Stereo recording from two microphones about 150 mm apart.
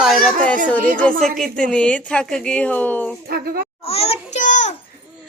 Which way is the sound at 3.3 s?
90° right.